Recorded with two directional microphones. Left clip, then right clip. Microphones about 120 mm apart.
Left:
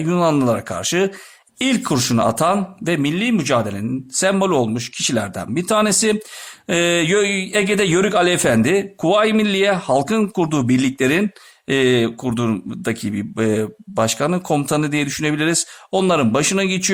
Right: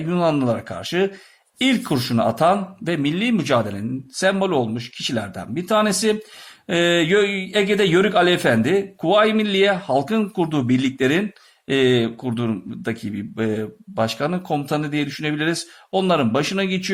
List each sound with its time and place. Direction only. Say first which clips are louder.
0.0 s speech: left 3 dB; 35° left (ahead or behind); by 3.8 s 15° left (ahead or behind)
4.2 s speech: left 2 dB; 35° left (ahead or behind)